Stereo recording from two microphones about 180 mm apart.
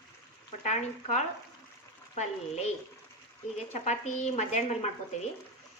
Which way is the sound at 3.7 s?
40° left (ahead or behind).